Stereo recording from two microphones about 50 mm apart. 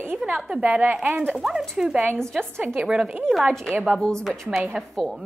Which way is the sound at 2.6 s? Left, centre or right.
Right.